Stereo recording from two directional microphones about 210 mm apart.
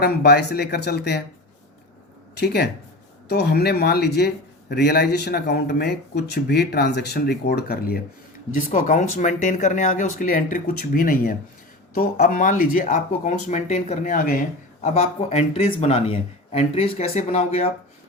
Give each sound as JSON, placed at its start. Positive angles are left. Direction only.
{"t": 0.0, "sound": "speech", "side_deg": 50}
{"t": 2.4, "sound": "speech", "side_deg": 50}